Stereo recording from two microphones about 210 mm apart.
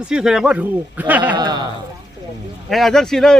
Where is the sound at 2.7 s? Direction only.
Centre (ahead or behind).